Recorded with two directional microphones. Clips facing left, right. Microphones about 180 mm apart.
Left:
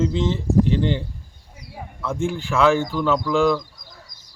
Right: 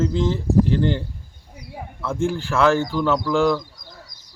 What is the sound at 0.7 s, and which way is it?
Speech, 15° left (ahead or behind).